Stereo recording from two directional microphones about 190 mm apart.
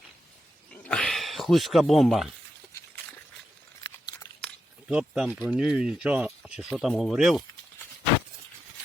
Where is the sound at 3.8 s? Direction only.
20° left (ahead or behind).